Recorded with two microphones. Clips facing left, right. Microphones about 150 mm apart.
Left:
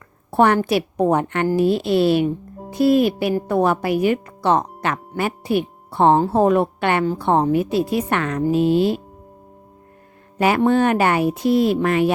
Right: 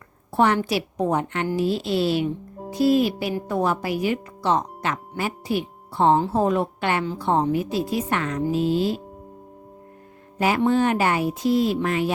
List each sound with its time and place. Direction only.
0.3 s a woman's voice: 55° left (ahead or behind)
10.3 s a woman's voice: 65° left (ahead or behind)